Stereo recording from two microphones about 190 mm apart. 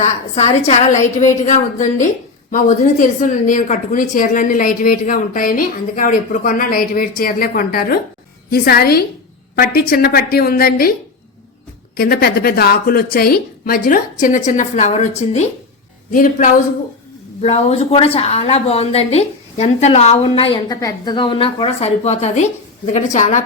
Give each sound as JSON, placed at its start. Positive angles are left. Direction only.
{"t": 0.0, "sound": "a woman's voice", "side_deg": 35}
{"t": 11.9, "sound": "a woman's voice", "side_deg": 50}
{"t": 17.4, "sound": "a woman's voice", "side_deg": 30}